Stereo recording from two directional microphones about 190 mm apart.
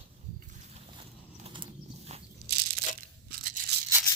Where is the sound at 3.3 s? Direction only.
50° right (ahead or behind).